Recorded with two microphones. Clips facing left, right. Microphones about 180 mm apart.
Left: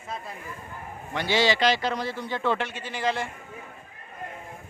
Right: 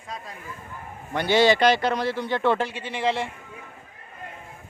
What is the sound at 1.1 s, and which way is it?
A man's voice, 55° right (ahead or behind).